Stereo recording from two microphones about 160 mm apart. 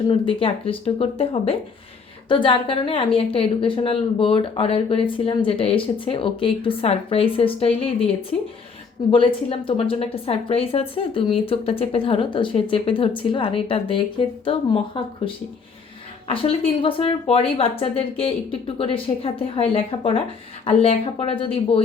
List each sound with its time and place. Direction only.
0.1 s a woman's voice: 35° left (ahead or behind)
9.1 s a woman's voice: 35° left (ahead or behind)
16.3 s a woman's voice: 35° left (ahead or behind)